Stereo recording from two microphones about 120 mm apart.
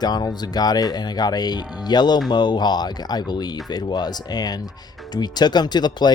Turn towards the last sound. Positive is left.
turn(degrees=35)  # may be behind; listen again after turning